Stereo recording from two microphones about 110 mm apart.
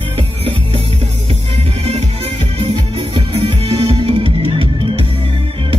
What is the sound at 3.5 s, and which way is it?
Music, 50° right (ahead or behind).